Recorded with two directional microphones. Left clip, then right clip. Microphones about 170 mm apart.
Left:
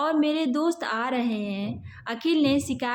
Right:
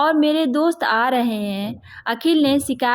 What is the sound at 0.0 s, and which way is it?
A woman's voice, 40° right (ahead or behind).